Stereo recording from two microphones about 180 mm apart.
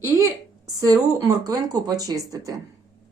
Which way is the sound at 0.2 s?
20° right (ahead or behind).